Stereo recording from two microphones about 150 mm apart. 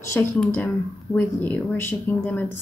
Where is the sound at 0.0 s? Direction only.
15° left (ahead or behind).